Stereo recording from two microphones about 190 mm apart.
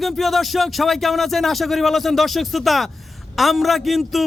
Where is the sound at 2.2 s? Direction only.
Centre (ahead or behind).